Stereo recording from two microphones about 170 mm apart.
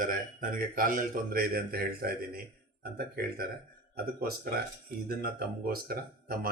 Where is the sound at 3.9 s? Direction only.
65° right (ahead or behind).